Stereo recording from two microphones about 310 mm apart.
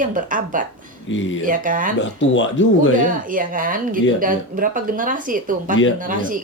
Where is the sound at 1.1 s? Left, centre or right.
Left.